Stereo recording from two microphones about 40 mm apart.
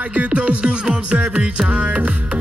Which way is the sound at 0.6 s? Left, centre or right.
Right.